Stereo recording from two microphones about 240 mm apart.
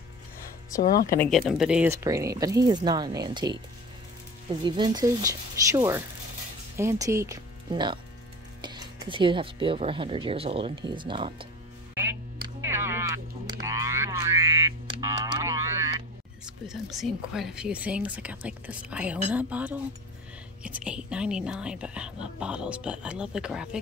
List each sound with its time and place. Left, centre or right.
1.0 s speech: centre
4.6 s speech: centre
11.9 s music: centre
16.4 s speech: centre